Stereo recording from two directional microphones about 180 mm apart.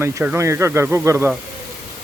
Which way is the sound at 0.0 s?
10° right (ahead or behind).